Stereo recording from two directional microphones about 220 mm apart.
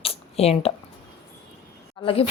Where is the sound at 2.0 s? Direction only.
25° left (ahead or behind).